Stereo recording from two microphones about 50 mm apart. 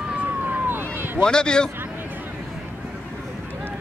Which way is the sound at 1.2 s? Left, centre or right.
Centre.